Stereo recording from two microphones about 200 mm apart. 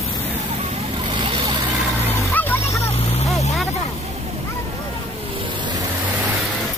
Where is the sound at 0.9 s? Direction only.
25° right (ahead or behind).